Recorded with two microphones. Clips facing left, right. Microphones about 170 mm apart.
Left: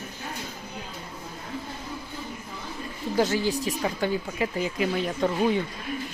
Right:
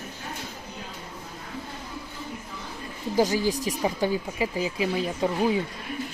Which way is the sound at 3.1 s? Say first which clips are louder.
Right 1 dB; 15° right (ahead or behind).